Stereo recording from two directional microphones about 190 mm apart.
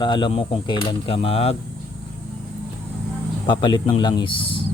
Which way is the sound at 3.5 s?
25° left (ahead or behind).